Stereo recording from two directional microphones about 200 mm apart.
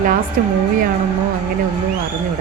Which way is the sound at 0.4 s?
45° right (ahead or behind).